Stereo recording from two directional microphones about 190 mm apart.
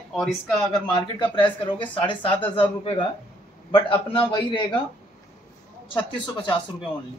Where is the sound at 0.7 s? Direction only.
25° left (ahead or behind).